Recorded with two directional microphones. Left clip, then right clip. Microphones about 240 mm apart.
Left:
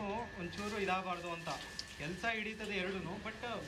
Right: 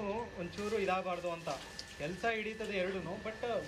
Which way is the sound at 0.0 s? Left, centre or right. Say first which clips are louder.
Right 2 dB; centre.